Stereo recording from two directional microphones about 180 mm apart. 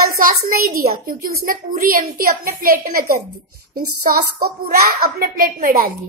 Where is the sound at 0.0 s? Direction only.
55° right (ahead or behind).